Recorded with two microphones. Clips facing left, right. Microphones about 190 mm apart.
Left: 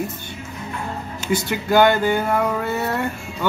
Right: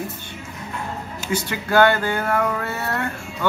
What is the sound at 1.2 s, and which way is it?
Speech, 15° left (ahead or behind).